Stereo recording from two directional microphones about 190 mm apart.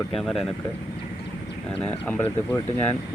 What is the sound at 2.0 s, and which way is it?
Speech, 10° left (ahead or behind).